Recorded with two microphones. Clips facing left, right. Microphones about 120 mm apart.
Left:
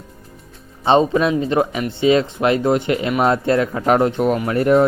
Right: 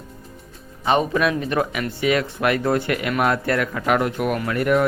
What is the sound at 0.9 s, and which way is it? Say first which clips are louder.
Speech: left 5 dB; 25° left (ahead or behind).